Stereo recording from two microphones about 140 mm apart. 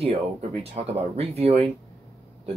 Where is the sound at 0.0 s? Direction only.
45° right (ahead or behind).